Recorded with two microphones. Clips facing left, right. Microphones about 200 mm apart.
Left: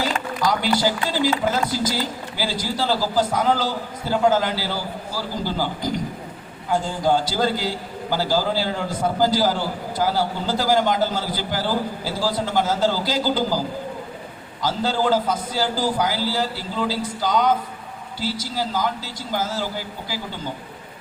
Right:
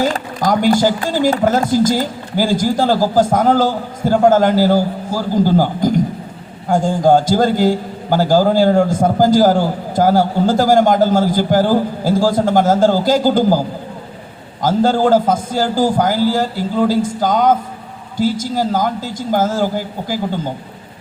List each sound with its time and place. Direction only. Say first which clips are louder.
0.0 s a man's voice: right 5 dB; 50° right (ahead or behind)
14.6 s a man's voice: right 8 dB; 50° right (ahead or behind)